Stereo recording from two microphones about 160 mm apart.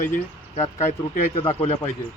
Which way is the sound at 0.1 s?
40° left (ahead or behind).